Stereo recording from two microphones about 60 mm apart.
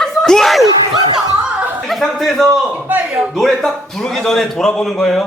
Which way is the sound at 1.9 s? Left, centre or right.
Centre.